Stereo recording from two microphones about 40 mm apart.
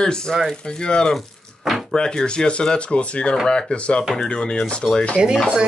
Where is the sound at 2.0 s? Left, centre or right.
Left.